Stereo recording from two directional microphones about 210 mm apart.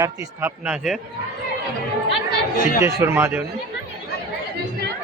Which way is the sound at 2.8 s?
10° right (ahead or behind).